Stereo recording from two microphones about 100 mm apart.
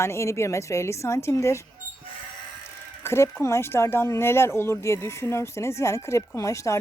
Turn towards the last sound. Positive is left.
turn(degrees=30)  # may be behind; listen again after turning